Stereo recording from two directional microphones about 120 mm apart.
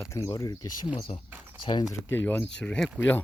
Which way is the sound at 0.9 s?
55° left (ahead or behind).